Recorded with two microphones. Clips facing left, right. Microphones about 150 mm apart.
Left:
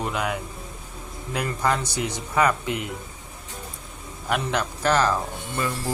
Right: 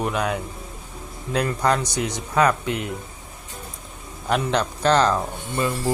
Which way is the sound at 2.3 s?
15° left (ahead or behind).